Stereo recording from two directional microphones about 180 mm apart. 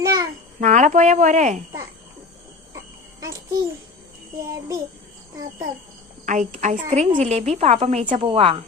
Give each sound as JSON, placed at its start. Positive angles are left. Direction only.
{"t": 0.0, "sound": "a sound", "side_deg": -20}
{"t": 0.6, "sound": "a woman's voice", "side_deg": -40}
{"t": 3.2, "sound": "a child's voice", "side_deg": -20}
{"t": 6.2, "sound": "a woman's voice", "side_deg": -45}